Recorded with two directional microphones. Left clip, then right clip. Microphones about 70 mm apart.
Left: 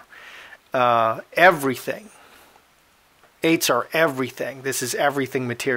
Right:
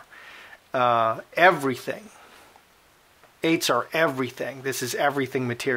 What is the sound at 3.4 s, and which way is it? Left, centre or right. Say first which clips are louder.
Speech: left 3 dB; left.